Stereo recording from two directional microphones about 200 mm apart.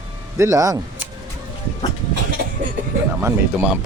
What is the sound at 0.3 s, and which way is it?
Speech, 15° right (ahead or behind).